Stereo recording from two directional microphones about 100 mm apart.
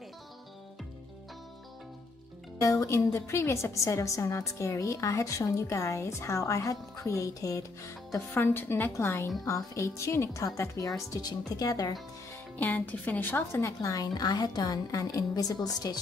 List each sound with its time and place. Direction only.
2.6 s a woman's voice: 30° left (ahead or behind)
12.5 s a woman's voice: 15° left (ahead or behind)
13.7 s a woman's voice: 35° left (ahead or behind)